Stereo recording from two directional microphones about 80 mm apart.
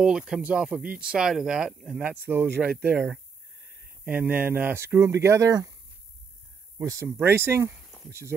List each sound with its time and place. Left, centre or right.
0.0 s speech: centre
2.0 s speech: right
6.8 s speech: right
7.1 s speech: right